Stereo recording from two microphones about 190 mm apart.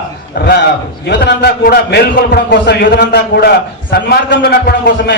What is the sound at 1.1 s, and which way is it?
A man's voice, 60° left (ahead or behind).